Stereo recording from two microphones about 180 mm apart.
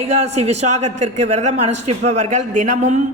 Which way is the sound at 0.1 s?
40° right (ahead or behind).